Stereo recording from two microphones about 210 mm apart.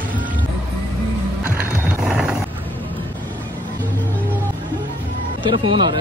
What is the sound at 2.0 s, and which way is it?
Vehicle, 5° right (ahead or behind).